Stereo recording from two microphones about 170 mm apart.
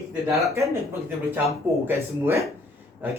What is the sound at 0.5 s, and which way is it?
Speech, 15° right (ahead or behind).